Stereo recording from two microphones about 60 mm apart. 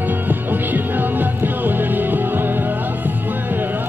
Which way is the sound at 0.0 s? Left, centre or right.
Right.